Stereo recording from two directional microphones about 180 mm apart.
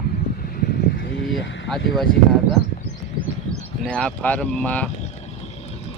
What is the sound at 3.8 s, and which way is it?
Speech, 5° left (ahead or behind).